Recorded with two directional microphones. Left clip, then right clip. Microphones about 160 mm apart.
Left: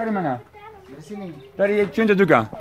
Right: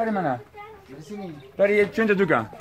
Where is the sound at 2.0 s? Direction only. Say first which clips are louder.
Left 4 dB; 80° left.